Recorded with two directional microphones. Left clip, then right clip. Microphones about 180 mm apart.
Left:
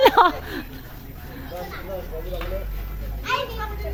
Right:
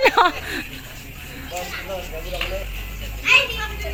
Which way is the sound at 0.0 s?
10° left (ahead or behind).